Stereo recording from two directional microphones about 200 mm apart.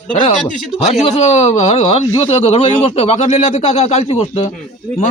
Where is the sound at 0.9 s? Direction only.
30° left (ahead or behind).